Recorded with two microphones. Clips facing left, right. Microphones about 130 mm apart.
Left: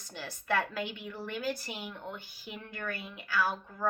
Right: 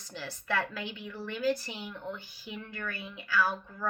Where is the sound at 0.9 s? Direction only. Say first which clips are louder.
Even; 20° left (ahead or behind).